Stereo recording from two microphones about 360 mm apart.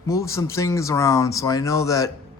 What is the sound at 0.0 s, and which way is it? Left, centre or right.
Speech, centre.